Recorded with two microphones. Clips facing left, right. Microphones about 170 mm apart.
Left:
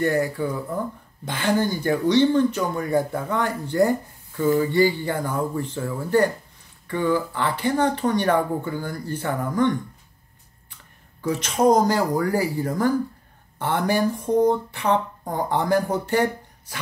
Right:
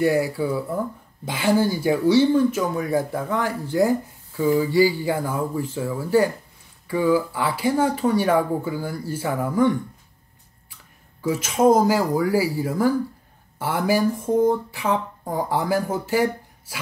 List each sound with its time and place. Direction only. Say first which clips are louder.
0.0 s speech: right 2 dB; 10° right (ahead or behind)
11.1 s speech: right 1 dB; 5° right (ahead or behind)